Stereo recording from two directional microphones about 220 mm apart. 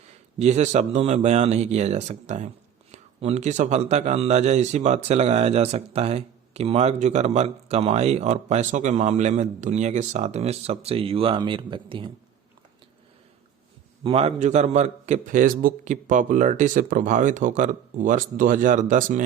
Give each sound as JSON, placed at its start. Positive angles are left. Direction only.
{"t": 0.3, "sound": "a man's voice", "side_deg": -30}
{"t": 14.0, "sound": "a man's voice", "side_deg": -25}